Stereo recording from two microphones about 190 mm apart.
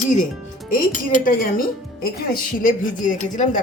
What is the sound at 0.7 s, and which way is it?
A woman's voice, 45° left (ahead or behind).